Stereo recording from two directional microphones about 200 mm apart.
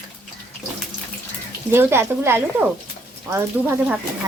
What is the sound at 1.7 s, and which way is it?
A woman's voice, 10° right (ahead or behind).